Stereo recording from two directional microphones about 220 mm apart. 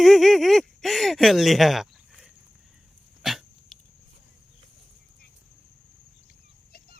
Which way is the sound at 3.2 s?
Centre (ahead or behind).